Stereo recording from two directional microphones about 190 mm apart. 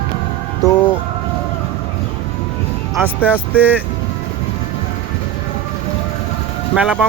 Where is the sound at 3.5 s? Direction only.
10° right (ahead or behind).